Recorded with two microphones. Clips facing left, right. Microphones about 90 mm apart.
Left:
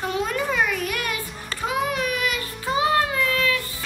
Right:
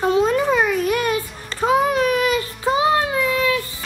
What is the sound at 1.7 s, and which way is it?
Child singing, 35° right (ahead or behind).